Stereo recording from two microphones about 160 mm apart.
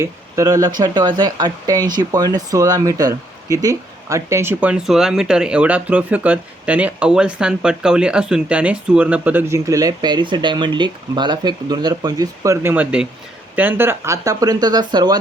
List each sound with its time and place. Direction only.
0.0 s speech: 20° right (ahead or behind)